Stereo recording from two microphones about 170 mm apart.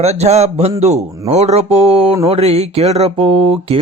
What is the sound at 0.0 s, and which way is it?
Speech, 40° right (ahead or behind).